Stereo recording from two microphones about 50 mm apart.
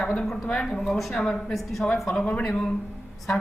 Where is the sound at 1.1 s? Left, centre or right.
Centre.